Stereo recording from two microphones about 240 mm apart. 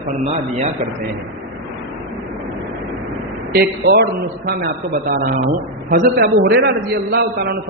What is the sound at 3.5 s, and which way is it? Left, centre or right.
A man's voice, right.